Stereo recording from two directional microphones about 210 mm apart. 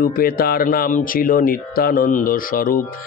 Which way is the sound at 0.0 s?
45° left (ahead or behind).